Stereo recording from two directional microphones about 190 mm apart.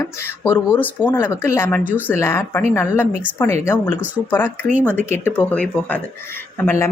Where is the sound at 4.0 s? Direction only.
10° right (ahead or behind).